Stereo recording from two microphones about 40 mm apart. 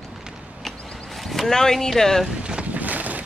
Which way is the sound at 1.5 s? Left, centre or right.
Centre.